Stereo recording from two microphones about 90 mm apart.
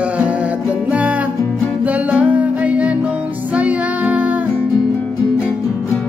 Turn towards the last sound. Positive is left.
turn(degrees=-15)  # may be behind; listen again after turning